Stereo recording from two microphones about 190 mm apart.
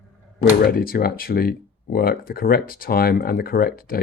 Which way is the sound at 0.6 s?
50° left (ahead or behind).